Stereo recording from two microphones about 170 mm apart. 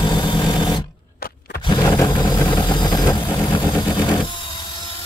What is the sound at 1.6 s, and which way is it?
Vehicle, 25° left (ahead or behind).